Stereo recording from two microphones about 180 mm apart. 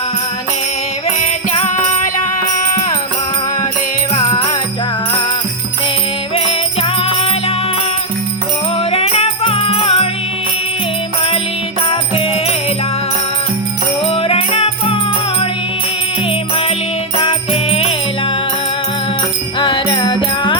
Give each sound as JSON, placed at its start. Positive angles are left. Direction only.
{"t": 4.1, "sound": "music", "side_deg": 20}
{"t": 6.3, "sound": "music", "side_deg": 30}
{"t": 8.8, "sound": "music", "side_deg": 35}
{"t": 11.9, "sound": "music", "side_deg": 30}
{"t": 14.1, "sound": "music", "side_deg": 30}
{"t": 17.2, "sound": "music", "side_deg": 30}
{"t": 19.5, "sound": "music", "side_deg": 25}